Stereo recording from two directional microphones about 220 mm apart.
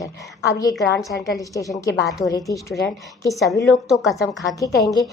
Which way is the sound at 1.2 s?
15° left (ahead or behind).